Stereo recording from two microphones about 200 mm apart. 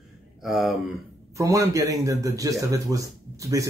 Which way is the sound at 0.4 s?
Centre (ahead or behind).